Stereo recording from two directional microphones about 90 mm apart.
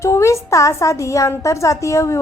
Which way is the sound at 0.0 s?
30° left (ahead or behind).